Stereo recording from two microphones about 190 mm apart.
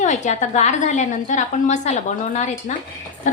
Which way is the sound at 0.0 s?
40° left (ahead or behind).